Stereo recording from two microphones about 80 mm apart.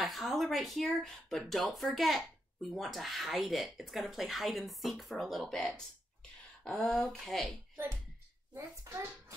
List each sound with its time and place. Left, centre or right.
0.0 s speech: centre
8.5 s a child's voice: right